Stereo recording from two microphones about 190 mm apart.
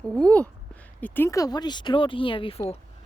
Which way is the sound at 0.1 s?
5° left (ahead or behind).